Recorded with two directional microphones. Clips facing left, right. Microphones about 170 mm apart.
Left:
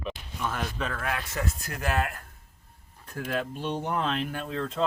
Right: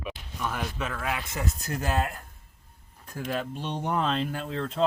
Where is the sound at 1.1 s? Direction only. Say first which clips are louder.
Even; 15° right (ahead or behind).